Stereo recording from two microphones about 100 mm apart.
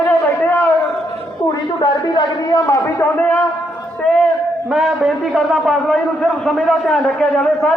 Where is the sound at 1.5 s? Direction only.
45° left (ahead or behind).